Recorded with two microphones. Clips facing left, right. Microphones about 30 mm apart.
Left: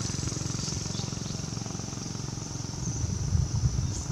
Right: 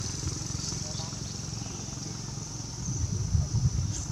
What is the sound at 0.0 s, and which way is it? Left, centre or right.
Vehicle, left.